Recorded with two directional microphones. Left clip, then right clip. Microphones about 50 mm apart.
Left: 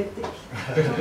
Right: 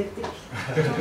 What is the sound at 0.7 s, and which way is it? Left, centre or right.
Speech, centre.